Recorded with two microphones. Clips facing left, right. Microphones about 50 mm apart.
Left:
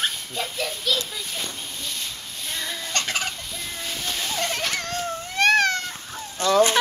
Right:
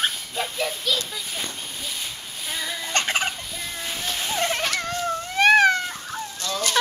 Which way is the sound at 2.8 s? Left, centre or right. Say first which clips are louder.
Right 4 dB; right.